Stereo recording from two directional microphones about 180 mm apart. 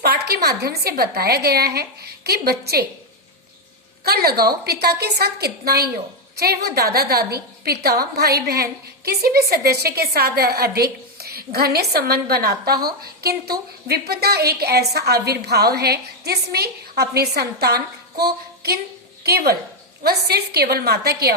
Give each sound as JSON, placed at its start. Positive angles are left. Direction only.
{"t": 0.0, "sound": "a woman's voice", "side_deg": -60}
{"t": 4.0, "sound": "a woman's voice", "side_deg": -60}